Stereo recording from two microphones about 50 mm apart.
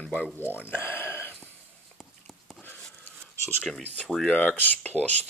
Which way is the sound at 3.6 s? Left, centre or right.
Centre.